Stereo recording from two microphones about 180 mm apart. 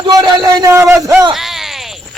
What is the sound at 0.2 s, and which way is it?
Speech, 20° right (ahead or behind).